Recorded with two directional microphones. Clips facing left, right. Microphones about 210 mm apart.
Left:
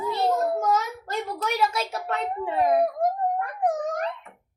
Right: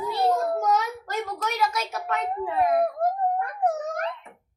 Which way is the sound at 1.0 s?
30° left (ahead or behind).